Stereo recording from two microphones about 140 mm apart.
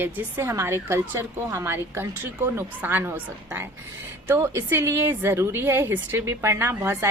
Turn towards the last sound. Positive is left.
turn(degrees=-15)  # may be behind; listen again after turning